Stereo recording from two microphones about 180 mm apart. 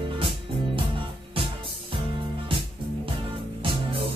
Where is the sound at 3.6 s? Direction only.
30° right (ahead or behind).